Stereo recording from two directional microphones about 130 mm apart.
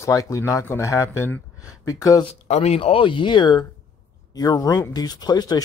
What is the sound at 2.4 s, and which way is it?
Speech, 55° left (ahead or behind).